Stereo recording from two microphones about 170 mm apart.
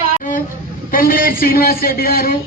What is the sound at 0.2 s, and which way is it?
Vehicle, 55° left (ahead or behind).